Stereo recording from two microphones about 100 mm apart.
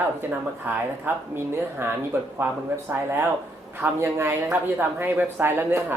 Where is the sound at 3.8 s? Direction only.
25° right (ahead or behind).